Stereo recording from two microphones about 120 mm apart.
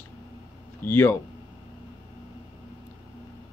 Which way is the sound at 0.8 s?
15° left (ahead or behind).